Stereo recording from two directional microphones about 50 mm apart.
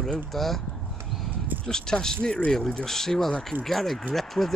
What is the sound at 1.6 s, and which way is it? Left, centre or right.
Speech, centre.